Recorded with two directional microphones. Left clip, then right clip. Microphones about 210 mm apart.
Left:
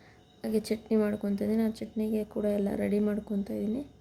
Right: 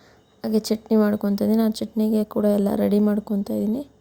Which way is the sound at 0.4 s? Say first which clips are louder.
Right 7 dB; 20° right (ahead or behind).